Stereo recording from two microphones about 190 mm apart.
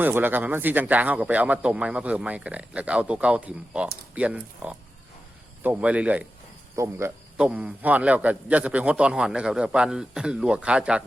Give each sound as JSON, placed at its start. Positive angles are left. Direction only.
{"t": 0.0, "sound": "a man's voice", "side_deg": -10}